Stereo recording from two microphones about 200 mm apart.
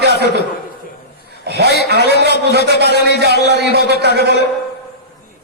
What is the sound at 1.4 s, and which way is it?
A man's voice, 55° right (ahead or behind).